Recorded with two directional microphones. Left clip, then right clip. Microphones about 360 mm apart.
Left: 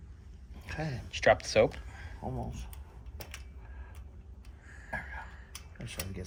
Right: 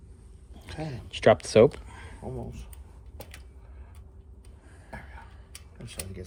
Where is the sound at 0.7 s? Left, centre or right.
Centre.